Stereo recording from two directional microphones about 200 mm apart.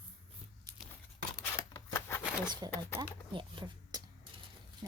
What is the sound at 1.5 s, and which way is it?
Scissors, 10° left (ahead or behind).